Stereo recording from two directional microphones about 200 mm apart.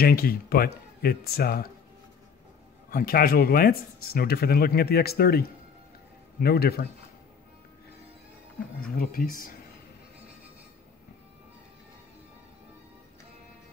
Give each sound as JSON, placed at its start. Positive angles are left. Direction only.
{"t": 0.0, "sound": "speech", "side_deg": 50}
{"t": 2.9, "sound": "speech", "side_deg": 45}
{"t": 8.8, "sound": "speech", "side_deg": 45}